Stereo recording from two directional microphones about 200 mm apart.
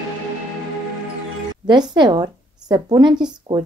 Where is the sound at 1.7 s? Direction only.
20° right (ahead or behind).